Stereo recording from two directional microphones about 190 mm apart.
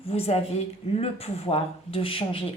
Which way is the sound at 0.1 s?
35° left (ahead or behind).